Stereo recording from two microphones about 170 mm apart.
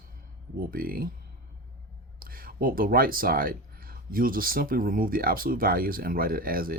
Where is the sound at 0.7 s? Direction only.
60° right (ahead or behind).